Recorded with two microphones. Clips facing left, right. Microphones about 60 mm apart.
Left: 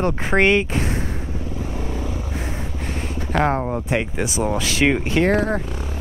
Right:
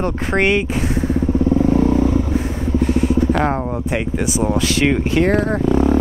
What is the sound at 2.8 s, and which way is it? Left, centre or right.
Vehicle, centre.